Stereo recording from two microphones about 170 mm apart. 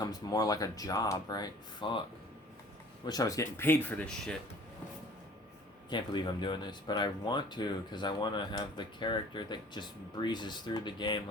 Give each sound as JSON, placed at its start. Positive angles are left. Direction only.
{"t": 0.0, "sound": "speech", "side_deg": 20}
{"t": 3.1, "sound": "speech", "side_deg": 20}
{"t": 5.9, "sound": "speech", "side_deg": 25}